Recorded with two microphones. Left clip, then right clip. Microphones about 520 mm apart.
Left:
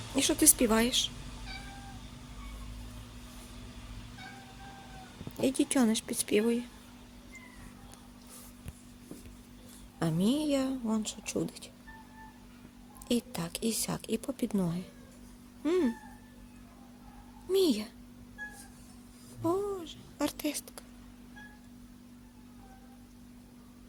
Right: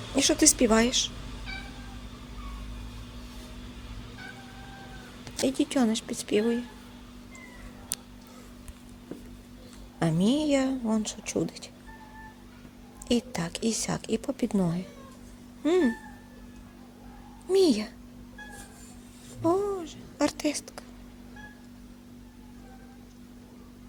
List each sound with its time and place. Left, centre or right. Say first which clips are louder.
0.2 s speech: right 5 dB; left
5.4 s a woman's voice: right 3 dB; left
10.0 s speech: right 5 dB; left
13.1 s speech: right 5 dB; left
17.5 s speech: right 5 dB; left
19.4 s a woman's voice: right 6 dB; left